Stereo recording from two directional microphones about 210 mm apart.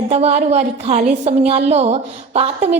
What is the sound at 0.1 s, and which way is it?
A woman's voice, 30° right (ahead or behind).